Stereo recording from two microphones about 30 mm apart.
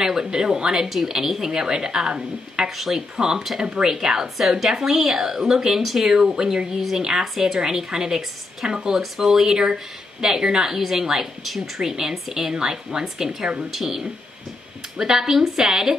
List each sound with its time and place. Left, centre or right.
0.2 s a woman's voice: right
2.7 s a woman's voice: centre
3.2 s speech: centre
3.9 s a woman's voice: centre
5.8 s a woman's voice: centre
6.0 s a woman's voice: centre
11.4 s a woman's voice: centre
11.8 s a woman's voice: centre